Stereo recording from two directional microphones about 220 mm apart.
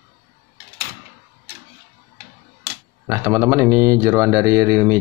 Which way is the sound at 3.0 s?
10° right (ahead or behind).